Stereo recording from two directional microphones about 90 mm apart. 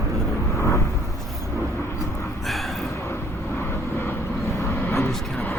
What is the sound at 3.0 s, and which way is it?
Vehicle, 25° left (ahead or behind).